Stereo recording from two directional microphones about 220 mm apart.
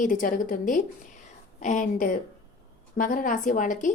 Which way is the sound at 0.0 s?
35° left (ahead or behind).